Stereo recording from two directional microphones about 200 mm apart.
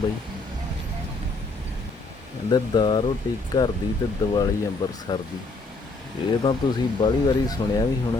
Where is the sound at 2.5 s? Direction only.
25° left (ahead or behind).